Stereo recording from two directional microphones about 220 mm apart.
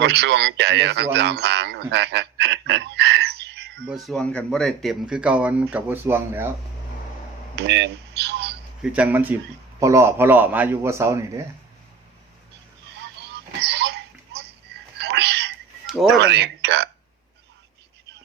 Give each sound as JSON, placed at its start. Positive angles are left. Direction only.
{"t": 0.0, "sound": "a man's voice", "side_deg": -50}
{"t": 3.8, "sound": "speech", "side_deg": 0}
{"t": 7.5, "sound": "speech", "side_deg": -50}
{"t": 8.8, "sound": "a man's voice", "side_deg": -5}
{"t": 13.3, "sound": "a sound", "side_deg": -50}
{"t": 14.9, "sound": "music", "side_deg": -50}
{"t": 16.1, "sound": "speech", "side_deg": -50}